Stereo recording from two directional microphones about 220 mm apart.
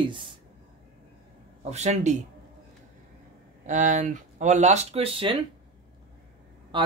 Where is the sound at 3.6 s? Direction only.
35° right (ahead or behind).